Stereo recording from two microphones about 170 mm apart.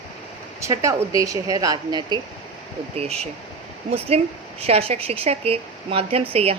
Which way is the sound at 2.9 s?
40° right (ahead or behind).